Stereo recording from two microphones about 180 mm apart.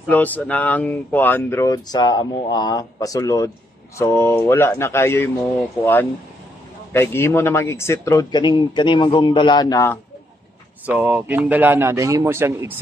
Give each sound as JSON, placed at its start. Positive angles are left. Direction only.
{"t": 0.1, "sound": "a man's voice", "side_deg": 10}
{"t": 10.9, "sound": "a man's voice", "side_deg": -10}